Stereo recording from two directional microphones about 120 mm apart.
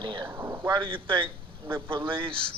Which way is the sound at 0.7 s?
45° right (ahead or behind).